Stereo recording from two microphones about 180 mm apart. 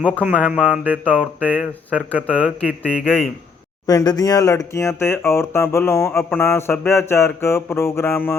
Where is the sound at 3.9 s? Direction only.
20° left (ahead or behind).